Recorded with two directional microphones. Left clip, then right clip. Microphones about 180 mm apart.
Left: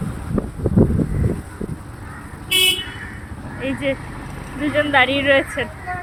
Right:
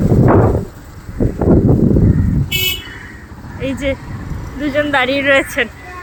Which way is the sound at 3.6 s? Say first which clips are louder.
Right 3 dB; 20° right (ahead or behind).